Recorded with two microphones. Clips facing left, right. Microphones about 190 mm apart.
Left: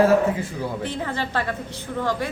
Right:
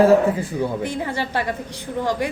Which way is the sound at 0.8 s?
15° right (ahead or behind).